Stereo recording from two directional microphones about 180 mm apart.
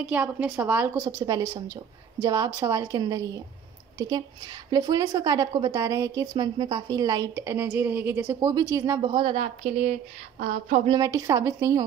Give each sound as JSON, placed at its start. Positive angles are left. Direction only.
{"t": 0.0, "sound": "a woman's voice", "side_deg": -10}
{"t": 4.6, "sound": "a woman's voice", "side_deg": -20}
{"t": 10.9, "sound": "a woman's voice", "side_deg": -20}